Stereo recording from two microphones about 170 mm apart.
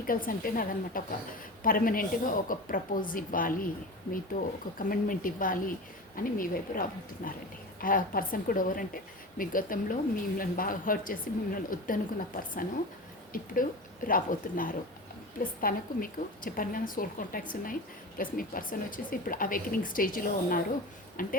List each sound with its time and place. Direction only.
0.1 s a woman's voice: 55° left (ahead or behind)